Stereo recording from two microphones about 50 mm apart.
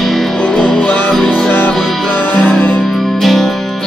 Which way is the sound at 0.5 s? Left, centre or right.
Left.